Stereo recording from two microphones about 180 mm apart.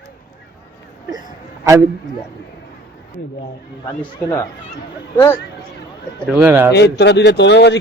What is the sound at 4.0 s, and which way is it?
Speech, 15° left (ahead or behind).